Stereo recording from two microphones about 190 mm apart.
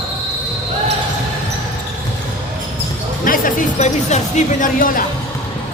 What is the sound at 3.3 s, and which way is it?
Speech, 40° left (ahead or behind).